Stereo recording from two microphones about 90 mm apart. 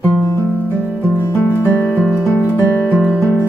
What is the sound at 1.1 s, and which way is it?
Music, 20° left (ahead or behind).